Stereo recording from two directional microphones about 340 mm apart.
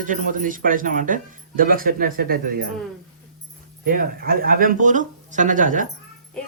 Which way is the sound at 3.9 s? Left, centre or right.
Right.